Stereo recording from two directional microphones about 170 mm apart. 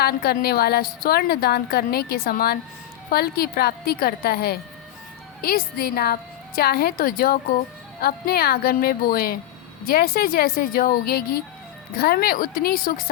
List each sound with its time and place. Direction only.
0.0 s a woman's voice: 65° left (ahead or behind)